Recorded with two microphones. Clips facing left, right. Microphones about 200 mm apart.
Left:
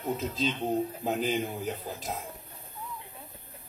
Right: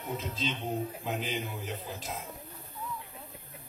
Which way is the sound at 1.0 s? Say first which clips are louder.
Left 6 dB; 40° left (ahead or behind).